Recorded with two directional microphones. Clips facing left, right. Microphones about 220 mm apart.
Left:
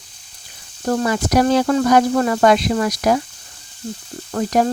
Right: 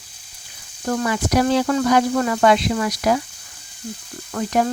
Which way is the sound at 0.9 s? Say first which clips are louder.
Left 3 dB; 35° left (ahead or behind).